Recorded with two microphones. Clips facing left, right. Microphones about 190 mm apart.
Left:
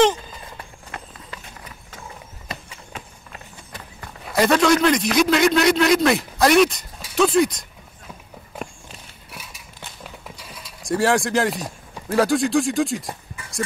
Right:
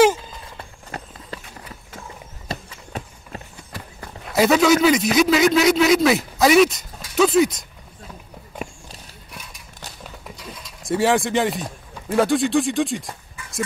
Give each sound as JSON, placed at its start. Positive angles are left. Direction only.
{"t": 0.9, "sound": "run", "side_deg": -40}
{"t": 2.4, "sound": "run", "side_deg": -35}
{"t": 4.2, "sound": "a man's voice", "side_deg": -5}
{"t": 9.3, "sound": "a sound", "side_deg": 5}
{"t": 10.8, "sound": "speech", "side_deg": 0}